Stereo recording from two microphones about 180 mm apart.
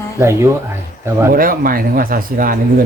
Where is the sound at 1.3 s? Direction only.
50° right (ahead or behind).